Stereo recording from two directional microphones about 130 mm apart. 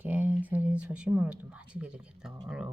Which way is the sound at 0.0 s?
15° right (ahead or behind).